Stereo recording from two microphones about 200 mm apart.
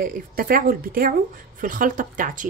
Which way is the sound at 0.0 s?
45° right (ahead or behind).